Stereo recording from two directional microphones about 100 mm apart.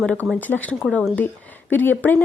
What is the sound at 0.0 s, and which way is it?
A woman's voice, 10° left (ahead or behind).